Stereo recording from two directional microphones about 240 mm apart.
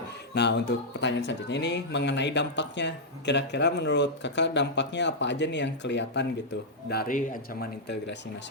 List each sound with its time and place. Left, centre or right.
0.3 s speech: left